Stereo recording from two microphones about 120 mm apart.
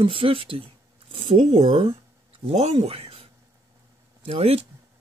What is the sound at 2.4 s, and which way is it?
Speech, 65° right (ahead or behind).